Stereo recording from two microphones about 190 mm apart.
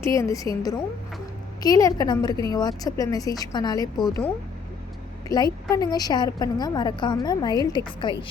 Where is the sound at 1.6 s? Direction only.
20° left (ahead or behind).